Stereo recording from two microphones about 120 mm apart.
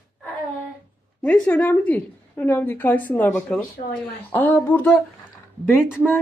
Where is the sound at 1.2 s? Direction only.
10° left (ahead or behind).